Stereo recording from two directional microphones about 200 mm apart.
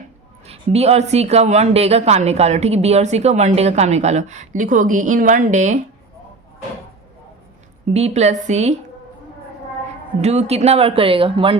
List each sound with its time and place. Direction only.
0.4 s speech: 30° right (ahead or behind)
7.9 s speech: 35° right (ahead or behind)
10.2 s speech: 35° right (ahead or behind)